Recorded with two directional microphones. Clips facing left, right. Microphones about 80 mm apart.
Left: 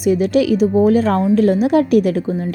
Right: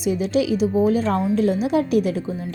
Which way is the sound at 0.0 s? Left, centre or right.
Left.